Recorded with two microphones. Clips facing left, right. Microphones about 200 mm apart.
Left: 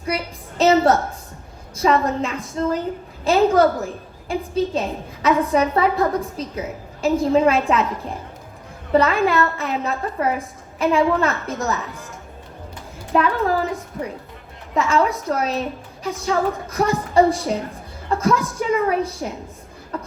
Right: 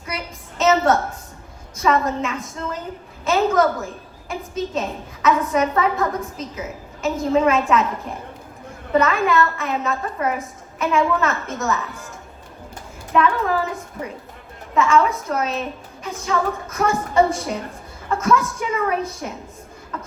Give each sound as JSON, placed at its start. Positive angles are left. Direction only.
{"t": 0.6, "sound": "a sound", "side_deg": 35}
{"t": 2.0, "sound": "a woman's voice", "side_deg": 30}
{"t": 8.9, "sound": "a woman's voice", "side_deg": 30}
{"t": 13.1, "sound": "a woman's voice", "side_deg": 35}
{"t": 14.8, "sound": "a woman's voice", "side_deg": 35}
{"t": 19.9, "sound": "beatboxing", "side_deg": 30}